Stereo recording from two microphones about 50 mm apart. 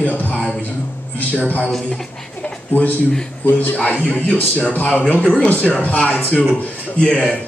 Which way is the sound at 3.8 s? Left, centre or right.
Left.